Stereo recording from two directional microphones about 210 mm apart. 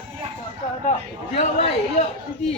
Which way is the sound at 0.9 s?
30° left (ahead or behind).